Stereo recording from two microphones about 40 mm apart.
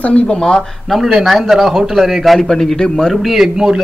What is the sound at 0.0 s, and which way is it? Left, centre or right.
Speech, left.